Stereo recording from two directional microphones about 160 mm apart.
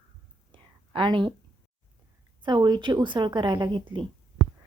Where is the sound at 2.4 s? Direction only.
30° right (ahead or behind).